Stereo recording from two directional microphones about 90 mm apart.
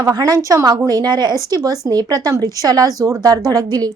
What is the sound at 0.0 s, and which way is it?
A woman's voice, 45° right (ahead or behind).